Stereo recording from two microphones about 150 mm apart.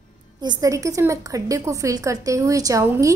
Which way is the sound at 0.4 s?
25° right (ahead or behind).